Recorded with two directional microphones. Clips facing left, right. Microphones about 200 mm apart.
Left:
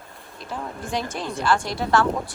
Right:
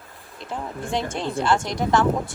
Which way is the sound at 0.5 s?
25° right (ahead or behind).